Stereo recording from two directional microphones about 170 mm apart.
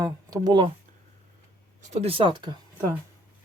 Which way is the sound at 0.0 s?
20° right (ahead or behind).